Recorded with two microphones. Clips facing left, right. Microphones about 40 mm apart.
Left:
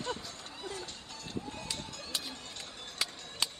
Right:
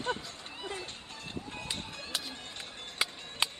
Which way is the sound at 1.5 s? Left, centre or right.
Right.